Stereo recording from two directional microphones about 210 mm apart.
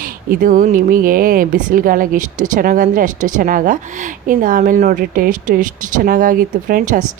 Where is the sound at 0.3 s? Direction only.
40° right (ahead or behind).